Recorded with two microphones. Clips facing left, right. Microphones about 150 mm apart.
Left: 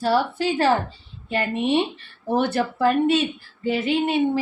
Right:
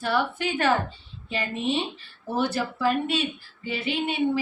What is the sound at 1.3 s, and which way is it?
A woman's voice, 60° left (ahead or behind).